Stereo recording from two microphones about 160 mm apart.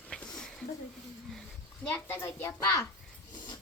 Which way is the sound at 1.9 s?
15° left (ahead or behind).